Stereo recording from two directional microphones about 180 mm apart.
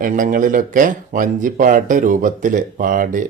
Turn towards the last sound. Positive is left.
turn(degrees=-50)  # may be behind; listen again after turning